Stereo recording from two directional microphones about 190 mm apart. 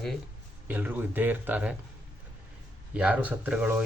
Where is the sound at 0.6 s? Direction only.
10° right (ahead or behind).